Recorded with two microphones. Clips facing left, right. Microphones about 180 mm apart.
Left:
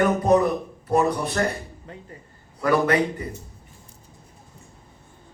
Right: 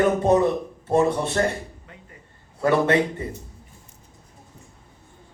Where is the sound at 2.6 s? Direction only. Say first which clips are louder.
Right 1 dB; 25° right (ahead or behind).